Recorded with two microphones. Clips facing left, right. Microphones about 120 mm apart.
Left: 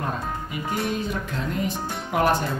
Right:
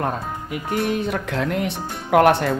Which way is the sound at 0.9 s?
65° right (ahead or behind).